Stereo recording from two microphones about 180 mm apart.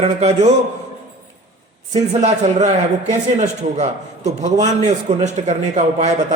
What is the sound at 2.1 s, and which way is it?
A man's voice, 40° right (ahead or behind).